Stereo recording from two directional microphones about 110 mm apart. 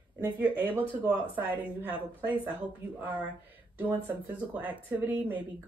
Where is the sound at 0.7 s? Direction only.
15° right (ahead or behind).